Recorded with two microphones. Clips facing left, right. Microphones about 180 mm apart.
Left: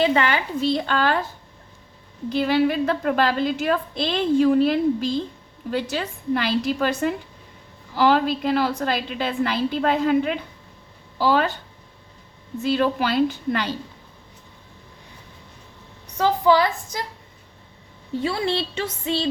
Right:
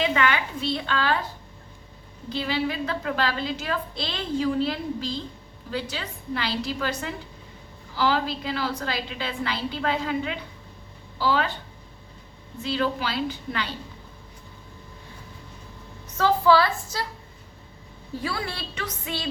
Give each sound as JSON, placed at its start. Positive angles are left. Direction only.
{"t": 0.0, "sound": "a woman's voice", "side_deg": 35}
{"t": 2.3, "sound": "a woman's voice", "side_deg": 50}
{"t": 12.6, "sound": "a woman's voice", "side_deg": 50}
{"t": 16.1, "sound": "a woman's voice", "side_deg": 15}
{"t": 18.1, "sound": "a woman's voice", "side_deg": 25}